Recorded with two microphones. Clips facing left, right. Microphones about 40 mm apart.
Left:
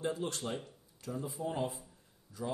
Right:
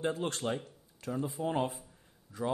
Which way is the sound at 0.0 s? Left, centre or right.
Right.